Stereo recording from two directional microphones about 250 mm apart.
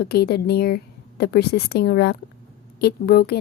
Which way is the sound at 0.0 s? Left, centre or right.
Left.